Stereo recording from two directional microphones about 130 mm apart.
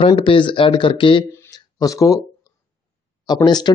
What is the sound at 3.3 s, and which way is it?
Speech, 30° left (ahead or behind).